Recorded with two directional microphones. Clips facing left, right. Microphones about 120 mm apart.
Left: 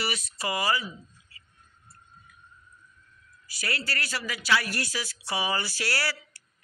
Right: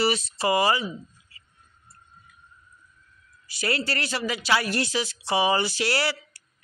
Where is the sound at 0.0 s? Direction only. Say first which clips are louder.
Right 8 dB; 30° right (ahead or behind).